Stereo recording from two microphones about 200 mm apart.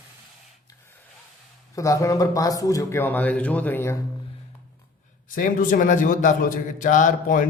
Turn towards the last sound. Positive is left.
turn(degrees=40)  # may be behind; listen again after turning